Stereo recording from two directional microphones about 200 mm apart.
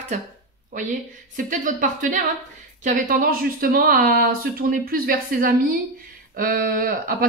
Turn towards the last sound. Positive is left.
turn(degrees=-45)  # may be behind; listen again after turning